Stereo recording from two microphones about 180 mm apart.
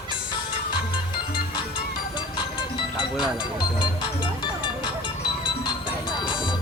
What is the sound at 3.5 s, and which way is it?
Music, 25° left (ahead or behind).